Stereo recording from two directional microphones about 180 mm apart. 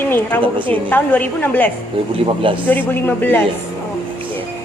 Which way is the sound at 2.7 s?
10° left (ahead or behind).